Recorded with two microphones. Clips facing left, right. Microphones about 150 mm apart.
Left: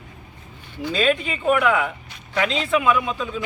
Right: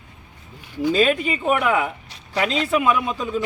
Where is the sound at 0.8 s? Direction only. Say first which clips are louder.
Right 3 dB; 15° right (ahead or behind).